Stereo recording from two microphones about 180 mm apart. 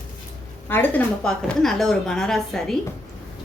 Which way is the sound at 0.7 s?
10° left (ahead or behind).